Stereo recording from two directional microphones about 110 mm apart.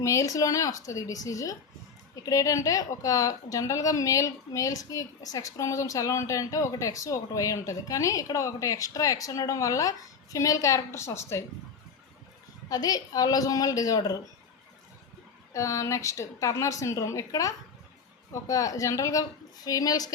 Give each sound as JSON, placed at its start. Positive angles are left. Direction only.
{"t": 0.0, "sound": "a woman's voice", "side_deg": 30}
{"t": 12.6, "sound": "a woman's voice", "side_deg": 35}
{"t": 15.5, "sound": "a woman's voice", "side_deg": 30}